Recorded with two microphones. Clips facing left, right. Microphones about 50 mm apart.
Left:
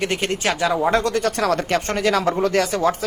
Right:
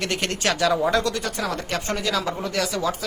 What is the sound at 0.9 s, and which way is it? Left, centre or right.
Speech, left.